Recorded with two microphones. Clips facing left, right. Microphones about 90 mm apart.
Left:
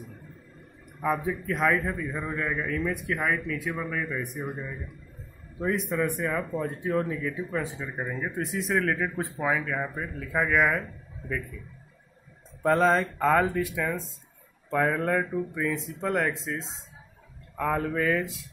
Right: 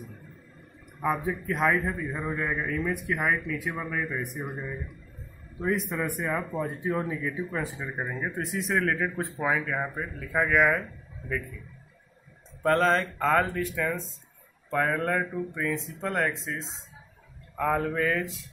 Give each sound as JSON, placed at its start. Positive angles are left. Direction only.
{"t": 1.0, "sound": "a man's voice", "side_deg": -5}
{"t": 5.6, "sound": "speech", "side_deg": 0}
{"t": 6.1, "sound": "a man's voice", "side_deg": -10}
{"t": 12.6, "sound": "speech", "side_deg": 10}